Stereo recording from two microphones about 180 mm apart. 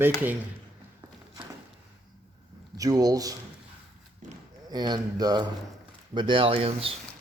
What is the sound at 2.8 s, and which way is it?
Speech, 20° right (ahead or behind).